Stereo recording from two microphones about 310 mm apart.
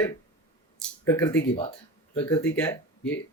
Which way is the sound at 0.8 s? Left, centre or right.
Centre.